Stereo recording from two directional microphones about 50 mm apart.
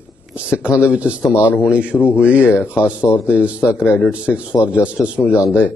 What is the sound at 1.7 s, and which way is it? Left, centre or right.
Speech, right.